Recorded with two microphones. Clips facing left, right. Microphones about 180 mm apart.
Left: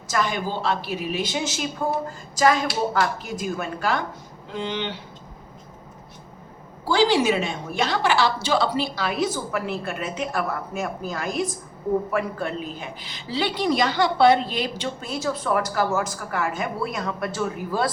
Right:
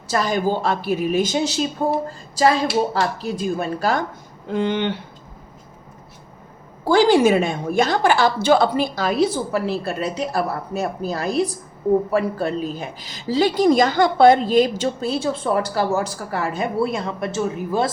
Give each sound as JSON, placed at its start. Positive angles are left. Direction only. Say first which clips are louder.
{"t": 0.1, "sound": "a woman's voice", "louder": "right 5 dB", "side_deg": -35}
{"t": 4.4, "sound": "a woman's voice", "louder": "right 7 dB", "side_deg": -55}
{"t": 6.8, "sound": "speech", "louder": "right 5 dB", "side_deg": -50}